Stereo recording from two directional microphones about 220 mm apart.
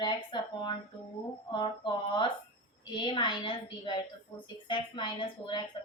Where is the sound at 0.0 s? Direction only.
20° left (ahead or behind).